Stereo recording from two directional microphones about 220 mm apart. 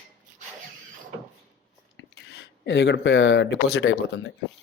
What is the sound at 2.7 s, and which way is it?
Speech, 55° left (ahead or behind).